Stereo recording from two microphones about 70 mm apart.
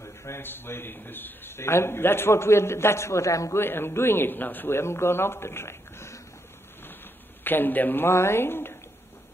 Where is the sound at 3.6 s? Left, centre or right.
Left.